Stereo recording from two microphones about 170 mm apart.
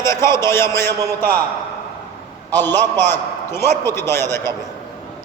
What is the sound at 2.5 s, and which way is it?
A man's voice, 10° left (ahead or behind).